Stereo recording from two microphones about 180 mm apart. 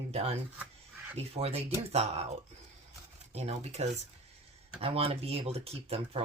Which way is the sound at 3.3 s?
35° right (ahead or behind).